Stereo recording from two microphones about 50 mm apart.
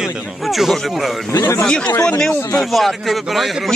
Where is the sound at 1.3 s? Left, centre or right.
Left.